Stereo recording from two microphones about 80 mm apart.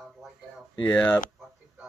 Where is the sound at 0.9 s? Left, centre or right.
Centre.